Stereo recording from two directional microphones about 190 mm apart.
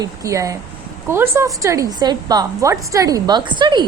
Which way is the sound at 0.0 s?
15° right (ahead or behind).